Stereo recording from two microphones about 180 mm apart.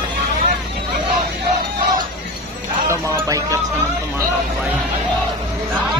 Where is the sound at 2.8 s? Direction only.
15° right (ahead or behind).